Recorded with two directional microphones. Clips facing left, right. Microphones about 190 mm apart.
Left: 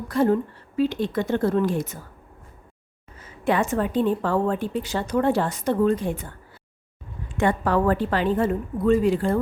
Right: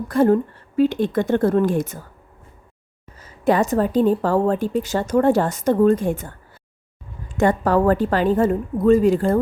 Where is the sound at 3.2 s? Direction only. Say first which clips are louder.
Right 5 dB; 40° right (ahead or behind).